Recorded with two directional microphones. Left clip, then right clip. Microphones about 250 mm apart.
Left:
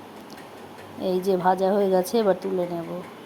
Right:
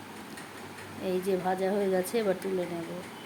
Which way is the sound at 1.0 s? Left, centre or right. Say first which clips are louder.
Left 8 dB; left.